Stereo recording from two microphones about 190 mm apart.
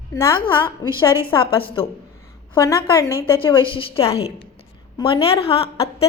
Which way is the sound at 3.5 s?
25° left (ahead or behind).